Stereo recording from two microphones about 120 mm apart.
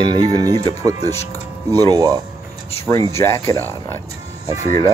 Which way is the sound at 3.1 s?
20° left (ahead or behind).